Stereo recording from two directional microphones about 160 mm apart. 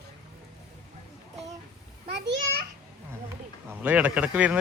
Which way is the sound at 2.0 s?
90° right.